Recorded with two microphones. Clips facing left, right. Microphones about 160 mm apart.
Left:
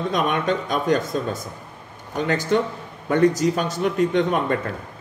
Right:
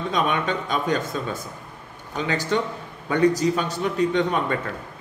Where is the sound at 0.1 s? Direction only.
50° left (ahead or behind).